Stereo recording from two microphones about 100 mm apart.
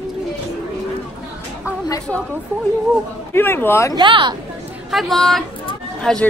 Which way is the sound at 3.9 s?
50° right (ahead or behind).